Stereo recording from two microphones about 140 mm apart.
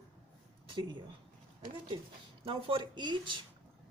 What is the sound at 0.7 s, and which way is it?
Speech, 35° right (ahead or behind).